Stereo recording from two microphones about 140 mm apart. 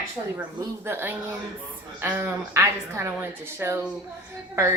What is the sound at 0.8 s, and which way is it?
A woman's voice, 15° right (ahead or behind).